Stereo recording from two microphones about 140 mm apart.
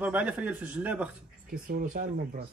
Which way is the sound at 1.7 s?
90° right.